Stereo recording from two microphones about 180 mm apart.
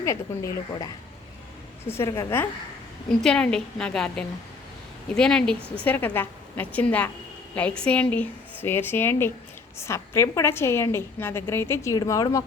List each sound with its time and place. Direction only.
0.0 s a woman's voice: 15° left (ahead or behind)
1.9 s a woman's voice: 15° left (ahead or behind)
5.5 s a woman's voice: 10° right (ahead or behind)
5.8 s a woman's voice: 10° left (ahead or behind)